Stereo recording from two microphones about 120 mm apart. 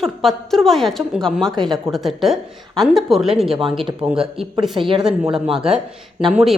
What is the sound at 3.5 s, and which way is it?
Speech, 45° right (ahead or behind).